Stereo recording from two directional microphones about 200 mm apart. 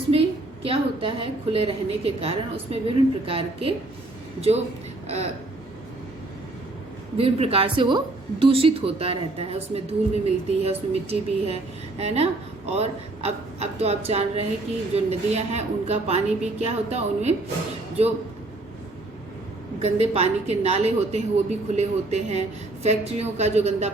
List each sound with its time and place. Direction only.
0.1 s a woman's voice: 30° right (ahead or behind)
5.0 s speech: 35° right (ahead or behind)
7.2 s a woman's voice: 30° right (ahead or behind)
19.8 s a woman's voice: 30° right (ahead or behind)